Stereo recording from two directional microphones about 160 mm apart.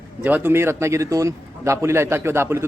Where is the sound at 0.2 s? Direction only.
10° right (ahead or behind).